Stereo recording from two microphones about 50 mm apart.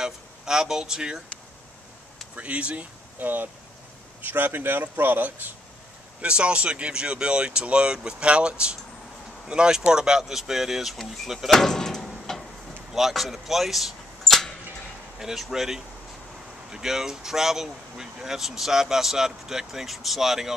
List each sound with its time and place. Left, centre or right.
0.0 s speech: centre
2.3 s speech: right
3.2 s speech: right
6.2 s speech: centre
11.5 s door: centre
12.9 s speech: centre
15.1 s speech: centre